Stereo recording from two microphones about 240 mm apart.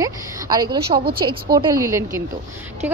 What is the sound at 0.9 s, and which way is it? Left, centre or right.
A woman's voice, right.